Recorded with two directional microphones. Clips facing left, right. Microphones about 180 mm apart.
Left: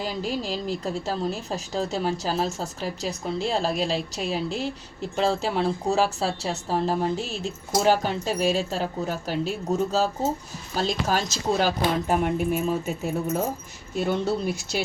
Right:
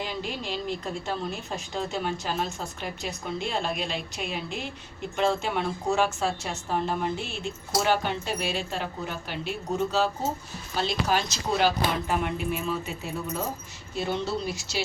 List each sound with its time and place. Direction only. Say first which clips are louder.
0.0 s a woman's voice: left 4 dB; 40° left (ahead or behind); by 14.8 s 55° left (ahead or behind)